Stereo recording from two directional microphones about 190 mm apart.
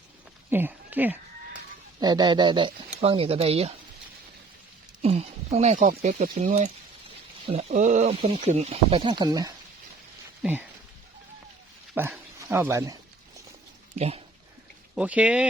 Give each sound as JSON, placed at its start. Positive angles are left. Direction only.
{"t": 0.5, "sound": "speech", "side_deg": -10}
{"t": 2.0, "sound": "speech", "side_deg": -20}
{"t": 5.0, "sound": "speech", "side_deg": -35}
{"t": 10.4, "sound": "speech", "side_deg": -10}
{"t": 12.1, "sound": "dog", "side_deg": -10}
{"t": 13.9, "sound": "speech", "side_deg": -35}
{"t": 14.9, "sound": "speech", "side_deg": -5}